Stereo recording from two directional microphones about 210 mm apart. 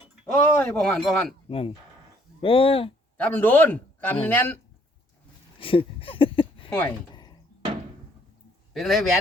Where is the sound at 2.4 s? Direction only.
25° left (ahead or behind).